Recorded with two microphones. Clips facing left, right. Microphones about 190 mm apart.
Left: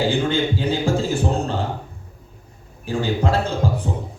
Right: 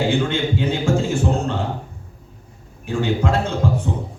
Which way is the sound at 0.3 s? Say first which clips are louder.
Left 1 dB; 35° left (ahead or behind).